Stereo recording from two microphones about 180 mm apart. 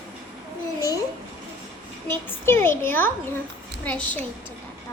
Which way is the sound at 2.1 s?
15° left (ahead or behind).